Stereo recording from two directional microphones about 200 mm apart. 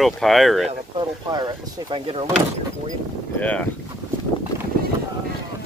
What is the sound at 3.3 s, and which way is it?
Speech, 5° left (ahead or behind).